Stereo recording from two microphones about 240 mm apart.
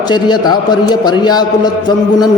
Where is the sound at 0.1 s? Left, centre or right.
Centre.